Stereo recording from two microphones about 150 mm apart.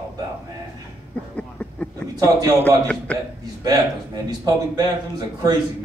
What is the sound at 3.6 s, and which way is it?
A man's voice, 25° right (ahead or behind).